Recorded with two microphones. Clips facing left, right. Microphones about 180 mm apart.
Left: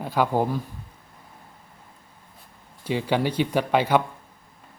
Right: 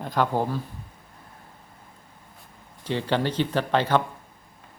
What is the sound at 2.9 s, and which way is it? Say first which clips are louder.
A man's voice: left 1 dB; 10° left (ahead or behind).